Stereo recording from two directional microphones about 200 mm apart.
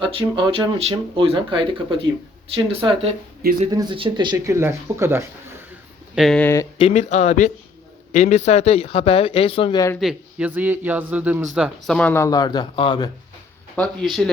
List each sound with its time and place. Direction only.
0.0 s speech: 25° right (ahead or behind)
6.1 s speech: centre (ahead or behind)
6.7 s speech: 30° left (ahead or behind)
10.0 s speech: 5° right (ahead or behind); by 13.1 s 25° left (ahead or behind)
13.7 s speech: centre (ahead or behind)